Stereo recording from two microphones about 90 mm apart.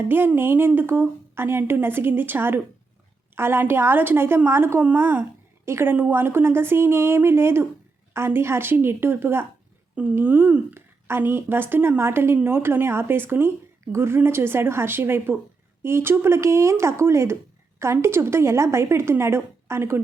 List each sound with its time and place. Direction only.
0.1 s speech: 25° right (ahead or behind)
9.9 s speech: 15° right (ahead or behind)